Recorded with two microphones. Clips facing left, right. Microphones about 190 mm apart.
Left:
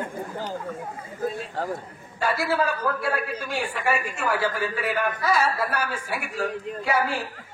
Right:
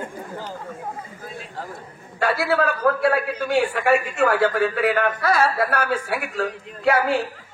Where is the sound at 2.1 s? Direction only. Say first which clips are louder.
Right 3 dB; 65° right (ahead or behind).